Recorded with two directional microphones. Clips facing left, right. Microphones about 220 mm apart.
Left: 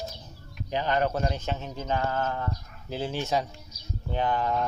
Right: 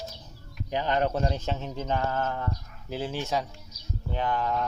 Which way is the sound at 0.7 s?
15° right (ahead or behind).